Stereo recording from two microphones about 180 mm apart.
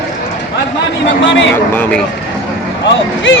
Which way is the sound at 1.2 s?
90° left.